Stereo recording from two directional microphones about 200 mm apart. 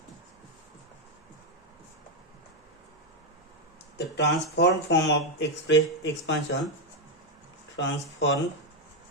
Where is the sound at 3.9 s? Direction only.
60° left (ahead or behind).